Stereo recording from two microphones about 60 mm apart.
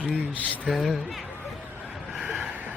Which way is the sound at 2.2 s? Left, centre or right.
Right.